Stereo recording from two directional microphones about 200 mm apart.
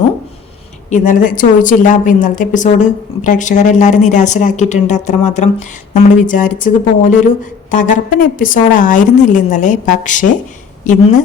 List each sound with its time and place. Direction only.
0.9 s a woman's voice: 40° left (ahead or behind)